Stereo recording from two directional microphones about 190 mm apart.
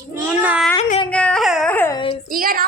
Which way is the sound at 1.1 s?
5° left (ahead or behind).